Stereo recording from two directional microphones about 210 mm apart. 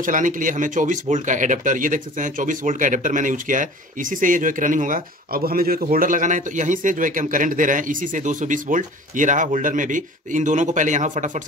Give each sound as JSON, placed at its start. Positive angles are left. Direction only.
{"t": 0.0, "sound": "speech", "side_deg": -40}